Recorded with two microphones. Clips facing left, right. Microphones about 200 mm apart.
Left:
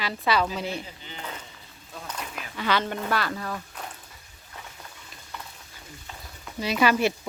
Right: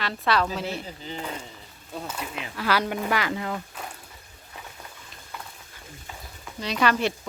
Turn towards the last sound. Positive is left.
turn(degrees=5)  # may be behind; listen again after turning